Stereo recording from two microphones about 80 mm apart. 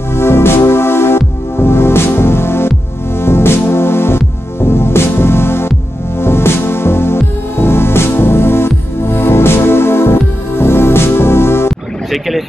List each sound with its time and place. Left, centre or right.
0.1 s music: left
12.1 s speech: centre